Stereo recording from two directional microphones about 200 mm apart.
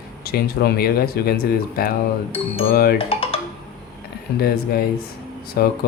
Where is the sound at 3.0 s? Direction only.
30° left (ahead or behind).